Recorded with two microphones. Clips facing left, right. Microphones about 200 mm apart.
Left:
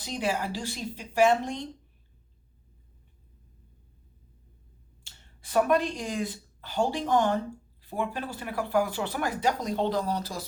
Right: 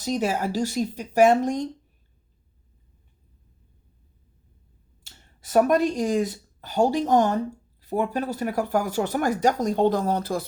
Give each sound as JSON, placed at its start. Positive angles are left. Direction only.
{"t": 0.0, "sound": "speech", "side_deg": -45}
{"t": 5.0, "sound": "speech", "side_deg": -40}